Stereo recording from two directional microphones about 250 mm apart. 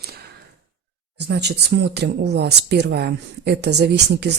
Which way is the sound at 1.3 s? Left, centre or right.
Right.